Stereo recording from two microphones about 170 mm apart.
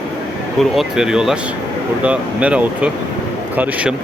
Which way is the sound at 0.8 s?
5° right (ahead or behind).